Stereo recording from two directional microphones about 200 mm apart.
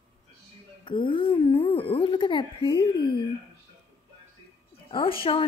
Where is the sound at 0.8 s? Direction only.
25° left (ahead or behind).